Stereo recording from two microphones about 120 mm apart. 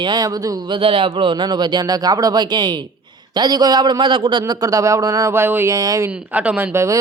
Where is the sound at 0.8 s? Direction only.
50° right (ahead or behind); by 6.1 s 30° right (ahead or behind).